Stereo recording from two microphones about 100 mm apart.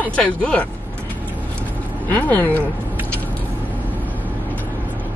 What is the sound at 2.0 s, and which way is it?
Speech, 15° left (ahead or behind).